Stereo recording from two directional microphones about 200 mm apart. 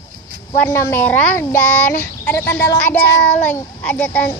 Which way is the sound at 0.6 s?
10° left (ahead or behind).